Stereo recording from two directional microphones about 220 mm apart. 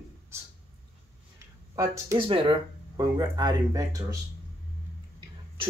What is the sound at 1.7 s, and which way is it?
Speech, 20° right (ahead or behind).